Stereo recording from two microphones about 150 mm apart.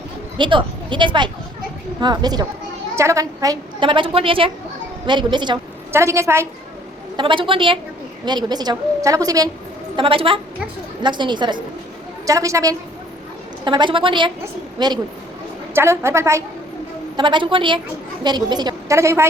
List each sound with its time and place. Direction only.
0.3 s a woman's voice: 30° right (ahead or behind)
5.9 s a woman's voice: 20° right (ahead or behind)
7.2 s a woman's voice: 35° right (ahead or behind)
9.9 s a woman's voice: 35° right (ahead or behind)
13.7 s a woman's voice: 30° right (ahead or behind)
15.7 s a woman's voice: 15° right (ahead or behind)
17.2 s a woman's voice: 30° right (ahead or behind)